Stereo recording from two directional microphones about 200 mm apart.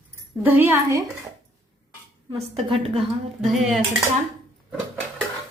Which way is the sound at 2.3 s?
30° right (ahead or behind).